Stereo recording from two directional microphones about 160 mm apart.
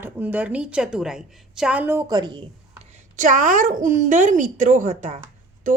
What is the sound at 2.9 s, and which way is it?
A woman's voice, 55° right (ahead or behind).